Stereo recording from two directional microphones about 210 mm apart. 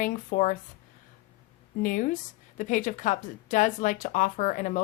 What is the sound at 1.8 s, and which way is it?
Speech, 40° left (ahead or behind).